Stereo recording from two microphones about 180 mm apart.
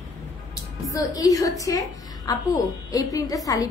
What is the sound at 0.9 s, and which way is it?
A woman's voice, 20° left (ahead or behind).